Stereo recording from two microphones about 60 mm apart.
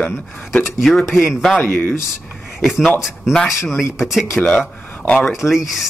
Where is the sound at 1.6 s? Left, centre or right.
Left.